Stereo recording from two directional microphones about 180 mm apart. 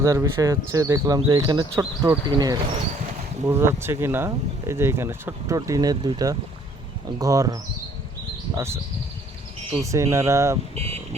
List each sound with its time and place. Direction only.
0.0 s speech: 15° right (ahead or behind)
9.8 s speech: 15° right (ahead or behind)
10.8 s speech: 35° right (ahead or behind)